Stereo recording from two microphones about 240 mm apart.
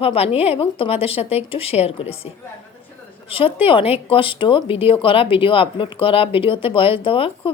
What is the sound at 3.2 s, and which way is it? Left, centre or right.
Speech, left.